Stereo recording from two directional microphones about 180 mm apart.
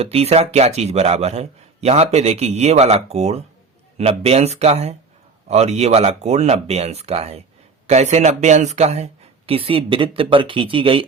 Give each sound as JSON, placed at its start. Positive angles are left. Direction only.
{"t": 0.0, "sound": "a man's voice", "side_deg": -35}